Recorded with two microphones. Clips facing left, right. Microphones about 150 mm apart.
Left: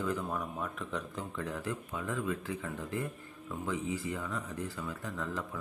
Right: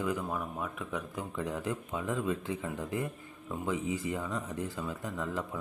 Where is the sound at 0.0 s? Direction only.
10° right (ahead or behind).